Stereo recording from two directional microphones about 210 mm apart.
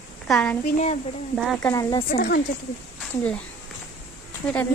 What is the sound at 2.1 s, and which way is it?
Speech, 40° left (ahead or behind).